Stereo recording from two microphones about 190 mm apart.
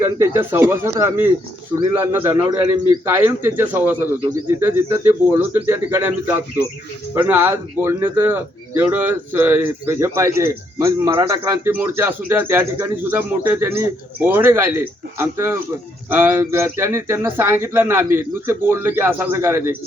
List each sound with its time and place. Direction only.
0.0 s a man's voice: 15° right (ahead or behind)